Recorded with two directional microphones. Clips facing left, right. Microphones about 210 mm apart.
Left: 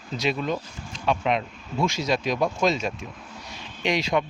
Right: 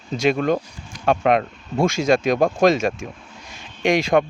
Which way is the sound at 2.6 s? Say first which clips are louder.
Right 7 dB; 90° right.